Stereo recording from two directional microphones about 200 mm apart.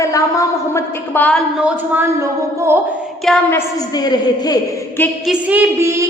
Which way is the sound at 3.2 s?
5° left (ahead or behind).